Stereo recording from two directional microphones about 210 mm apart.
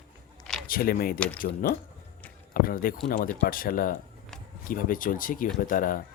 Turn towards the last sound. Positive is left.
turn(degrees=40)  # may be behind; listen again after turning